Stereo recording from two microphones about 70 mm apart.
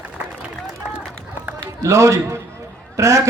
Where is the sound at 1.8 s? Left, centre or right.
Right.